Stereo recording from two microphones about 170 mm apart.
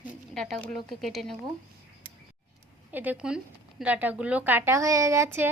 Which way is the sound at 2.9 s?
10° right (ahead or behind).